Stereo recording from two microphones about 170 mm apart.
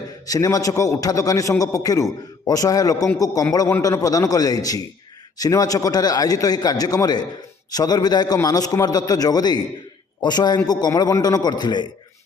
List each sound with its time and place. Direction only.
0.3 s a man's voice: 20° left (ahead or behind)